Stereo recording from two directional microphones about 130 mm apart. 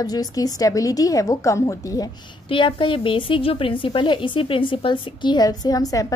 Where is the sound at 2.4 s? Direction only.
40° left (ahead or behind).